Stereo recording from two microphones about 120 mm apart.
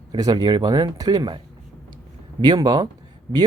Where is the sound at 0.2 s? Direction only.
35° right (ahead or behind).